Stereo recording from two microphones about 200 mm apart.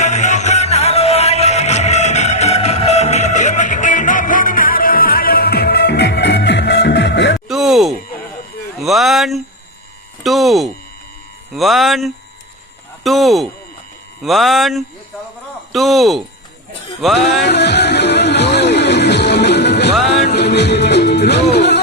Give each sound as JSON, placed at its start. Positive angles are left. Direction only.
{"t": 0.0, "sound": "music", "side_deg": 35}
{"t": 7.4, "sound": "music", "side_deg": 0}
{"t": 8.8, "sound": "a sound", "side_deg": 0}
{"t": 10.2, "sound": "speech", "side_deg": 0}
{"t": 17.4, "sound": "music", "side_deg": 60}